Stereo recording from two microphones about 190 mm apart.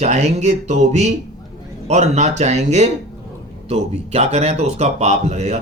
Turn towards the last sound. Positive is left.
turn(degrees=-35)  # may be behind; listen again after turning